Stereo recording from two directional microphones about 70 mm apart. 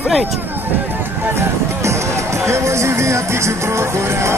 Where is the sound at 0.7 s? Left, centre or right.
Right.